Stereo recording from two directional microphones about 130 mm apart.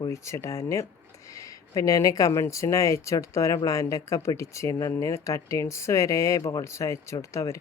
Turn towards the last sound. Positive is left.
turn(degrees=25)  # may be behind; listen again after turning